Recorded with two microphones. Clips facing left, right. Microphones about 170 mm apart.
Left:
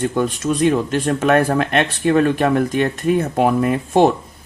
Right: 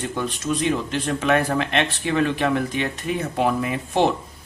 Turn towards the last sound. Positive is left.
turn(degrees=50)  # may be behind; listen again after turning